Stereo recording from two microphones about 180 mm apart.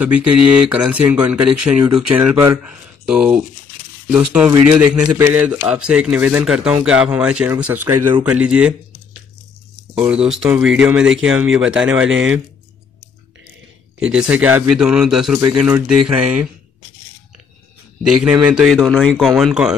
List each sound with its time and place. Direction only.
0.0 s a man's voice: 5° right (ahead or behind)
9.9 s speech: 5° right (ahead or behind)
13.9 s speech: 5° right (ahead or behind)
18.0 s speech: 5° right (ahead or behind)